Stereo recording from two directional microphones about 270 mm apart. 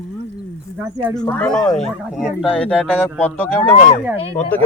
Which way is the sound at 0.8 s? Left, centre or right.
Centre.